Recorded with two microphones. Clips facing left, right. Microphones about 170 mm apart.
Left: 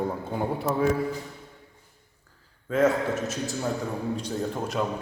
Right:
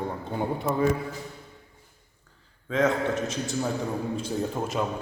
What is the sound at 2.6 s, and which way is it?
A man's voice, 5° left (ahead or behind).